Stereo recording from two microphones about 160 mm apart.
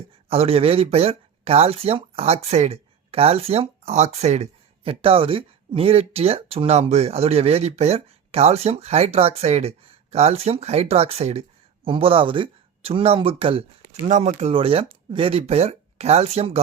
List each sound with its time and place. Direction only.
0.3 s speech: 40° right (ahead or behind)